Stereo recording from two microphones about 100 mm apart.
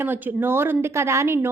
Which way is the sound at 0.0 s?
20° right (ahead or behind).